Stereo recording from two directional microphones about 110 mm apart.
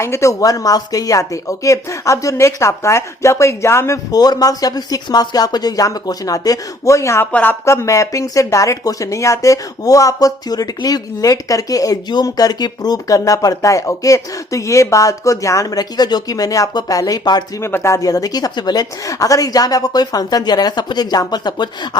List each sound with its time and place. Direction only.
0.0 s speech: 25° left (ahead or behind)
7.3 s a woman's voice: 15° left (ahead or behind)
7.6 s speech: 25° left (ahead or behind)
17.6 s speech: 20° left (ahead or behind); by 21.7 s 40° left (ahead or behind)